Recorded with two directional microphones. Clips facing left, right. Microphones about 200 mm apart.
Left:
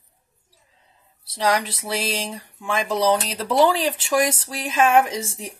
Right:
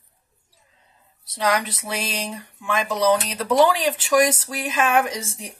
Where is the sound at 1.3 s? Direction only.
30° left (ahead or behind).